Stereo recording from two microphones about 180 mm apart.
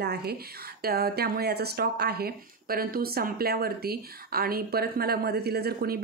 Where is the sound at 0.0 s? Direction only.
65° right (ahead or behind).